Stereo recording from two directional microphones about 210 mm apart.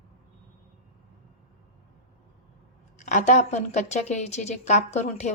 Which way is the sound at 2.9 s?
35° left (ahead or behind).